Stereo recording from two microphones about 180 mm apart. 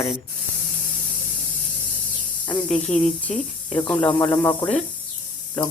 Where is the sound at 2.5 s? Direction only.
5° left (ahead or behind).